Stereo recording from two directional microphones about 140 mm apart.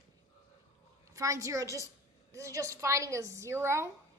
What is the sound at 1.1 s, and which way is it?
A woman's voice, 25° right (ahead or behind).